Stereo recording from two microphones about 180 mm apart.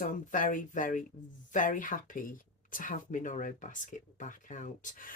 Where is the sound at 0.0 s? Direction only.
45° left (ahead or behind).